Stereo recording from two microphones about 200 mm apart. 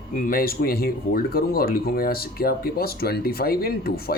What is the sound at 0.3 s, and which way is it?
Speech, 45° left (ahead or behind).